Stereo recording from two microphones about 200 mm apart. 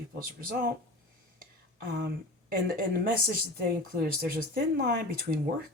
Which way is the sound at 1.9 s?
50° right (ahead or behind).